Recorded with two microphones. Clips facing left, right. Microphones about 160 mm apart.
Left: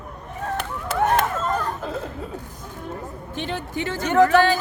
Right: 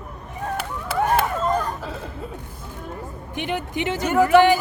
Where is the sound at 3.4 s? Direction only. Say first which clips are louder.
Right 2 dB; 15° right (ahead or behind).